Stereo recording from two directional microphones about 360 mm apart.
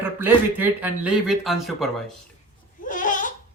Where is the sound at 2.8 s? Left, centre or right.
Left.